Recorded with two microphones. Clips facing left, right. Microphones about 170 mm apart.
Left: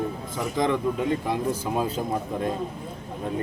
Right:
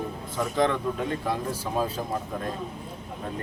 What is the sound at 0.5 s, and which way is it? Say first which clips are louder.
Speech: left 1 dB; 15° left (ahead or behind).